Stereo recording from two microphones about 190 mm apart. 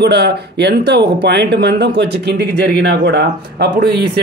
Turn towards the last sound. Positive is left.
turn(degrees=-60)  # may be behind; listen again after turning